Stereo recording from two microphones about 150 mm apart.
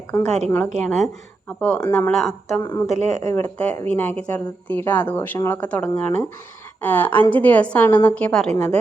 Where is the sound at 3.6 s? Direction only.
10° left (ahead or behind).